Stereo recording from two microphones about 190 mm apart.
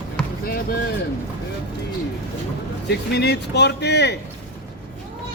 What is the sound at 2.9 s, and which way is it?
Speech, 60° left (ahead or behind).